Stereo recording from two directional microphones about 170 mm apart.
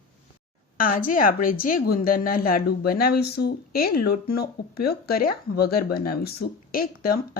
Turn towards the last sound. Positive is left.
turn(degrees=60)  # may be behind; listen again after turning